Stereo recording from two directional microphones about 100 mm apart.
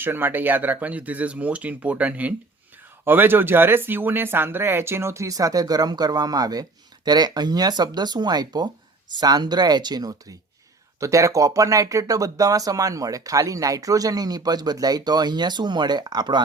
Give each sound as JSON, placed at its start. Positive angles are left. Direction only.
{"t": 0.0, "sound": "speech", "side_deg": -20}